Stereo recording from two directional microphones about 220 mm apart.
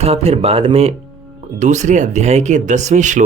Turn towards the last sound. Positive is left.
turn(degrees=-35)  # may be behind; listen again after turning